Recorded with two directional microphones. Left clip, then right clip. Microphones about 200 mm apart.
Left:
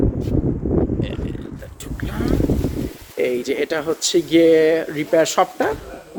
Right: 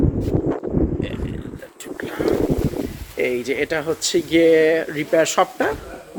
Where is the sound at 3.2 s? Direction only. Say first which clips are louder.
Left 1 dB; 15° left (ahead or behind).